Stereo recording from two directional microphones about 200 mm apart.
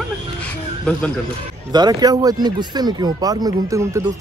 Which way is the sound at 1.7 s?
20° right (ahead or behind).